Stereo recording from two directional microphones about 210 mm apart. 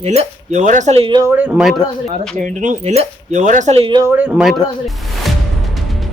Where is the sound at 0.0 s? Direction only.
30° right (ahead or behind).